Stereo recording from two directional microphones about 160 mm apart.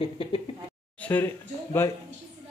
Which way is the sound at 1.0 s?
10° left (ahead or behind).